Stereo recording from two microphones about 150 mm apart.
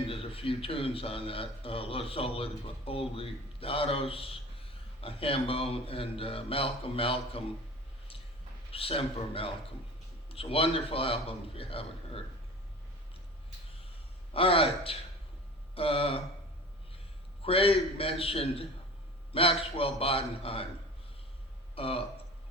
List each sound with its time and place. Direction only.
0.1 s a man's voice: 40° left (ahead or behind)
8.7 s a man's voice: 40° left (ahead or behind)
14.3 s a man's voice: 40° left (ahead or behind)
17.4 s a man's voice: 40° left (ahead or behind)
21.8 s speech: 40° left (ahead or behind)